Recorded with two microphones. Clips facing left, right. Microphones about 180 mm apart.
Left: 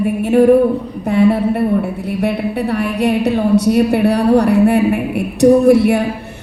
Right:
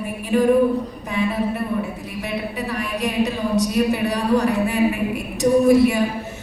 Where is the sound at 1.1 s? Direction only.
60° left (ahead or behind).